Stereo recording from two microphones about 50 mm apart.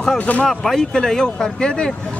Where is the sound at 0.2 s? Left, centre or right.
Left.